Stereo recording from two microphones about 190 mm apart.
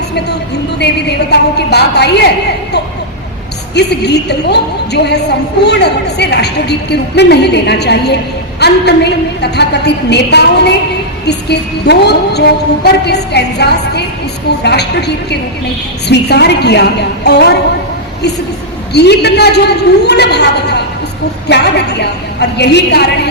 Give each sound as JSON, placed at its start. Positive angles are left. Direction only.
{"t": 0.8, "sound": "a woman's voice", "side_deg": 60}
{"t": 3.8, "sound": "a woman's voice", "side_deg": 60}
{"t": 18.9, "sound": "a woman's voice", "side_deg": 60}